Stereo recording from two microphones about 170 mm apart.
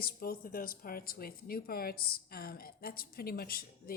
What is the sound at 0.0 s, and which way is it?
Speech, 60° left (ahead or behind).